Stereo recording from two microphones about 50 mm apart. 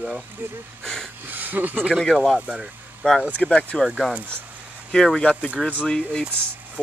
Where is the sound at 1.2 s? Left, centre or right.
Right.